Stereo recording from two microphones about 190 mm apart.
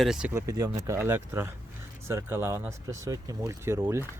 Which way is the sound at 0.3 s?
15° right (ahead or behind).